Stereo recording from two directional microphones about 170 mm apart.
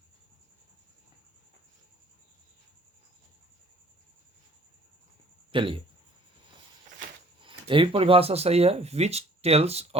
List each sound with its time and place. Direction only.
5.5 s speech: 30° right (ahead or behind)
7.4 s speech: 30° right (ahead or behind)